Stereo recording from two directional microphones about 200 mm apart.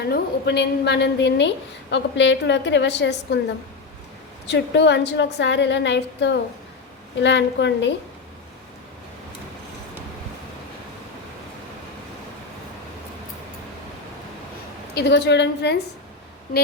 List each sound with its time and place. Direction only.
0.0 s a woman's voice: 55° left (ahead or behind)
4.4 s a woman's voice: 60° left (ahead or behind)
14.9 s a woman's voice: 55° left (ahead or behind)